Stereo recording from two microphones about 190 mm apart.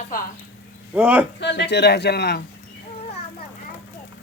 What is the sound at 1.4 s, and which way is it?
A man's voice, 65° left (ahead or behind).